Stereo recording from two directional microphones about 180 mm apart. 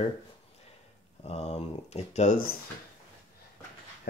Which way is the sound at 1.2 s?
35° left (ahead or behind).